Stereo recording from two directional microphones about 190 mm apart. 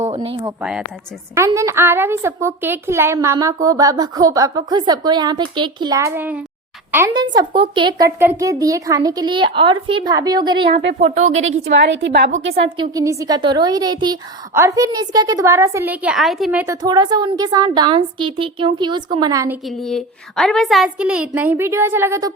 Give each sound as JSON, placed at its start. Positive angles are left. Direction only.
{"t": 0.1, "sound": "speech", "side_deg": -30}
{"t": 0.4, "sound": "a woman's voice", "side_deg": -5}
{"t": 1.4, "sound": "a woman's voice", "side_deg": -15}
{"t": 11.0, "sound": "a woman's voice", "side_deg": -35}
{"t": 11.3, "sound": "a woman's voice", "side_deg": -90}
{"t": 11.6, "sound": "a woman's voice", "side_deg": -65}
{"t": 12.5, "sound": "a woman's voice", "side_deg": -25}
{"t": 16.8, "sound": "a woman's voice", "side_deg": -20}
{"t": 19.6, "sound": "a woman's voice", "side_deg": 0}